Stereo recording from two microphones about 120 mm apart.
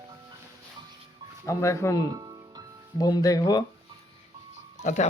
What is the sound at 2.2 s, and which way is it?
Music, 35° right (ahead or behind).